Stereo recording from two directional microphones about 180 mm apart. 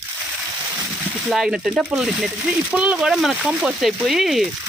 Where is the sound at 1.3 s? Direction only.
Centre (ahead or behind).